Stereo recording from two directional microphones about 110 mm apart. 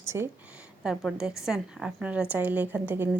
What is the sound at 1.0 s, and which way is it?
A woman's voice, 5° left (ahead or behind).